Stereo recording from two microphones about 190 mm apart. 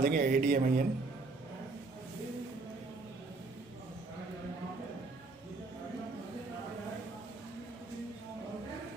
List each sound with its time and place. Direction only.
0.0 s a man's voice: 50° right (ahead or behind)